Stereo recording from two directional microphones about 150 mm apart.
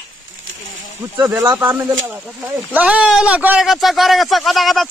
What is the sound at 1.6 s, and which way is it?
Speech, 10° right (ahead or behind).